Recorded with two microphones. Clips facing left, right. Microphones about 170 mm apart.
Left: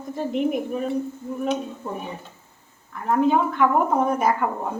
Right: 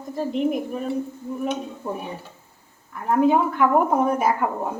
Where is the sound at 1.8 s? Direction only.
10° right (ahead or behind).